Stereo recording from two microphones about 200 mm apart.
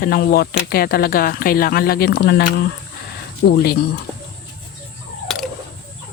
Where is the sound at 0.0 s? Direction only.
50° left (ahead or behind).